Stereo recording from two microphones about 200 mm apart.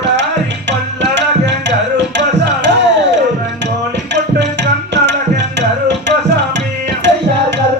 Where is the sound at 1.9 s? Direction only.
60° right (ahead or behind).